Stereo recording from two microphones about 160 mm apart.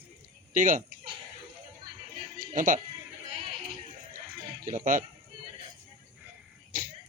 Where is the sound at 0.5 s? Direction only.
55° right (ahead or behind).